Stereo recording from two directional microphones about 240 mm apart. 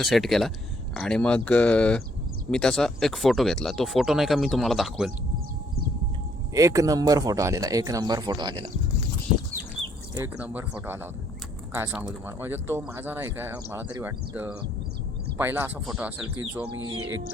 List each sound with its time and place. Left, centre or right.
0.0 s speech: centre
6.5 s speech: centre
10.2 s speech: centre
16.2 s speech: right